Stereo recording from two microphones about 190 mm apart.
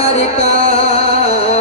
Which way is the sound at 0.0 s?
30° left (ahead or behind).